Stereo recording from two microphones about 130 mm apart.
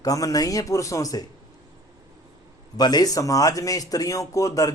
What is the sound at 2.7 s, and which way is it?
A man's voice, 30° left (ahead or behind).